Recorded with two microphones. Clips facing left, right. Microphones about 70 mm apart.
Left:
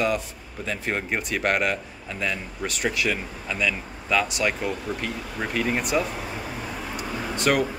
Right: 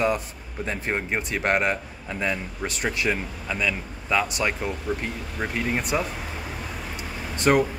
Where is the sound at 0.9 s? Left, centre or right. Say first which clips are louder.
Right 1 dB; centre; by 4.5 s right.